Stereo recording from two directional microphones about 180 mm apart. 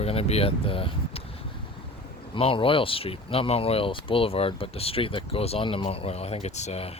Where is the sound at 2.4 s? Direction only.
30° left (ahead or behind).